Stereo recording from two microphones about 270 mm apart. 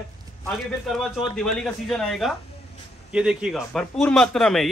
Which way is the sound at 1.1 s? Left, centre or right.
Centre.